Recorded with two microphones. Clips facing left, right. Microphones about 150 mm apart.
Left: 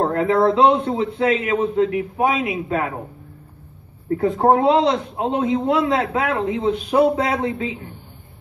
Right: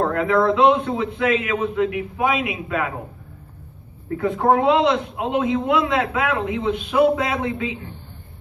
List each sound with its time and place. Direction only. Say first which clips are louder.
0.0 s a man's voice: left 2 dB; 35° left (ahead or behind)
4.1 s a man's voice: left 2 dB; 35° left (ahead or behind)